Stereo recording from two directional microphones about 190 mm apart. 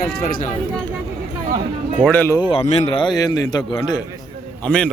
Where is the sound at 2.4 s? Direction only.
30° left (ahead or behind).